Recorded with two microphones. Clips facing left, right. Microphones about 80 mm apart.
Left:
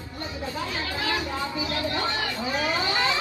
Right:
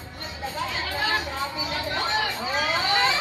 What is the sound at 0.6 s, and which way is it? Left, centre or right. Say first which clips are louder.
Chatter: right 3 dB; right.